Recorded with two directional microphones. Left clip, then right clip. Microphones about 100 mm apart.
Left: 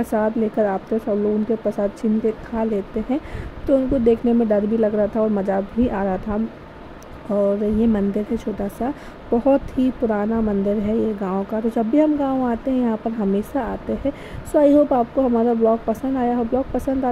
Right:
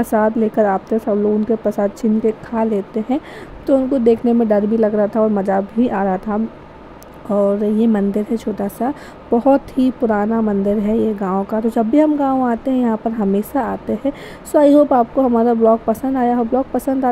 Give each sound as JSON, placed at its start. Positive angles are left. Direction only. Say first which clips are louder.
{"t": 0.0, "sound": "a woman's voice", "louder": "right 5 dB", "side_deg": -25}